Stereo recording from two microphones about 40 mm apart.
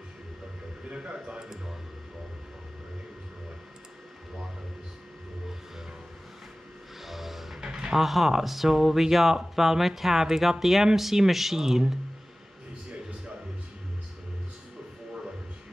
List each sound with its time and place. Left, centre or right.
0.8 s speech: right
7.0 s music: centre
7.6 s speech: centre